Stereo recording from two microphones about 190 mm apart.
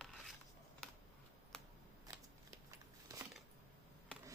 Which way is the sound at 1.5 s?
5° left (ahead or behind).